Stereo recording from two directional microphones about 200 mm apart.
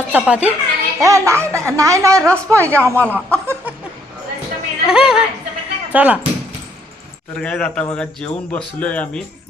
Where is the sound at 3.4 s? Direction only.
10° right (ahead or behind).